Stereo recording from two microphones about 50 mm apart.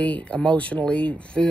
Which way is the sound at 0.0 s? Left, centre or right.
Left.